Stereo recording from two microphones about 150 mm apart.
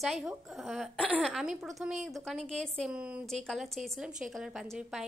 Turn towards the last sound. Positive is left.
turn(degrees=-5)  # may be behind; listen again after turning